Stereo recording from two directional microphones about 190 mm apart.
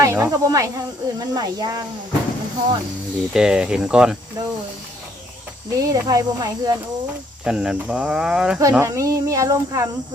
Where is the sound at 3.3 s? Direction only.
5° right (ahead or behind).